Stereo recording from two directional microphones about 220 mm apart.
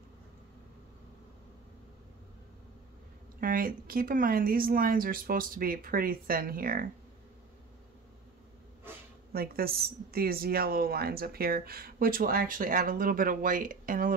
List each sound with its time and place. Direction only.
3.3 s speech: 40° right (ahead or behind)
9.3 s a woman's voice: 45° right (ahead or behind)